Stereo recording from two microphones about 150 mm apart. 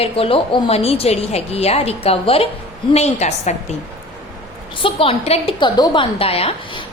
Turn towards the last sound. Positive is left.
turn(degrees=40)  # may be behind; listen again after turning